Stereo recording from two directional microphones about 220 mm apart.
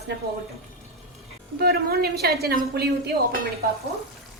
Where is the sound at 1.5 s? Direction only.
45° right (ahead or behind).